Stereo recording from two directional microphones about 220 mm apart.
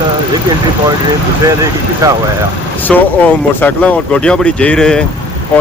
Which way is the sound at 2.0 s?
15° right (ahead or behind).